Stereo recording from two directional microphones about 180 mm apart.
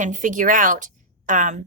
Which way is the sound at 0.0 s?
45° right (ahead or behind).